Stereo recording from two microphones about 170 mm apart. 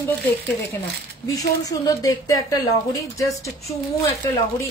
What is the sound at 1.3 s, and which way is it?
A woman's voice, 20° left (ahead or behind).